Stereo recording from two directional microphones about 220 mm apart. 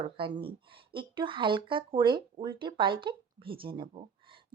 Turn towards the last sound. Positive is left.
turn(degrees=-25)  # may be behind; listen again after turning